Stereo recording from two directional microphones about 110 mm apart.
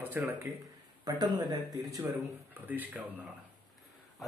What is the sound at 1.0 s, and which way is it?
Speech, 35° right (ahead or behind).